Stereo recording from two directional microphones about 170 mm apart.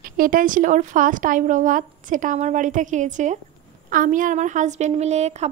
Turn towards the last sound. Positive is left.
turn(degrees=-40)  # may be behind; listen again after turning